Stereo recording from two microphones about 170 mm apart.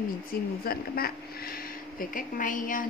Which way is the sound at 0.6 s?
60° left (ahead or behind).